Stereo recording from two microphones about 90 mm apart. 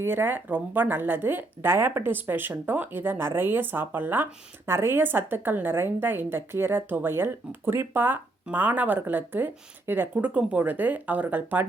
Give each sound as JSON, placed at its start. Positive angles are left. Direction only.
{"t": 0.0, "sound": "a woman's voice", "side_deg": -25}